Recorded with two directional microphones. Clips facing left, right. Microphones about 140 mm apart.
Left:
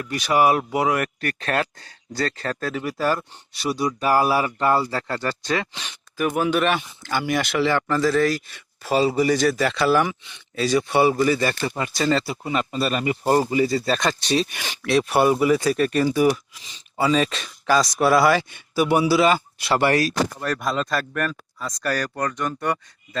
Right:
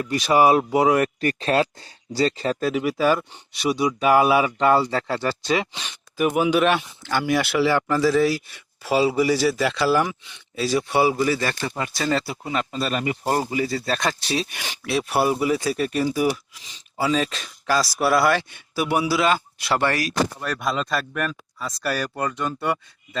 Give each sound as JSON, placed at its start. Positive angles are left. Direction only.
{"t": 0.0, "sound": "speech", "side_deg": -25}
{"t": 2.6, "sound": "speech", "side_deg": -5}
{"t": 19.9, "sound": "speech", "side_deg": 25}
{"t": 20.4, "sound": "speech", "side_deg": 0}